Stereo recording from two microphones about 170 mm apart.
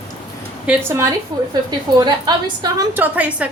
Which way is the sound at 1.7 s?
25° right (ahead or behind).